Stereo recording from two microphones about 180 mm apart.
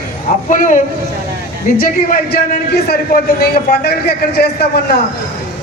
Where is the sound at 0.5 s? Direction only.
45° left (ahead or behind).